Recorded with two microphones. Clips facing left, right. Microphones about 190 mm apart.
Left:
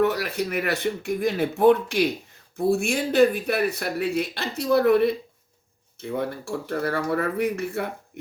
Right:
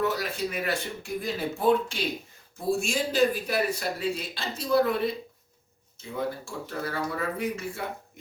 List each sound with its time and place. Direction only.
0.0 s speech: 65° left (ahead or behind)